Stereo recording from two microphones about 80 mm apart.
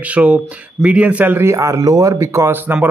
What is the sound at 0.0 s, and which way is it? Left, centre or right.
Speech, centre.